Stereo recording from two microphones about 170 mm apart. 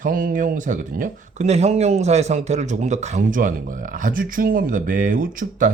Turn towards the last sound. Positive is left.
turn(degrees=-50)  # may be behind; listen again after turning